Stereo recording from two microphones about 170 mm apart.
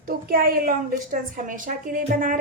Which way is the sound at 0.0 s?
55° right (ahead or behind).